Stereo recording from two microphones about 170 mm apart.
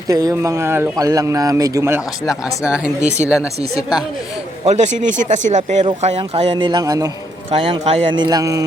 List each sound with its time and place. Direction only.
0.1 s speech: 20° right (ahead or behind)
2.2 s speech: 5° right (ahead or behind)
3.0 s speech: 40° right (ahead or behind)
4.6 s a man's voice: 40° right (ahead or behind); by 7.1 s 20° right (ahead or behind)
7.5 s speech: 35° right (ahead or behind)